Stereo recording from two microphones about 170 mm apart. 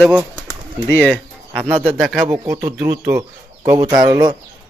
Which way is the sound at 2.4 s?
20° right (ahead or behind).